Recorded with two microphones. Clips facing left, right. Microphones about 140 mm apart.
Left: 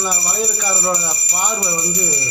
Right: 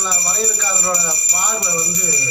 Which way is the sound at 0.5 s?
15° left (ahead or behind).